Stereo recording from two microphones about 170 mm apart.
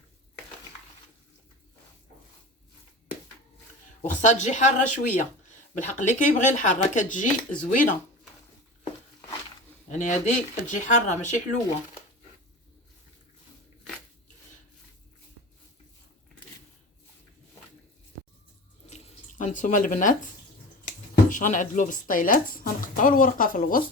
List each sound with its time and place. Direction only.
4.1 s speech: 45° left (ahead or behind)
9.9 s speech: 45° left (ahead or behind)
18.9 s water tap: 40° left (ahead or behind)
20.8 s speech: 50° left (ahead or behind)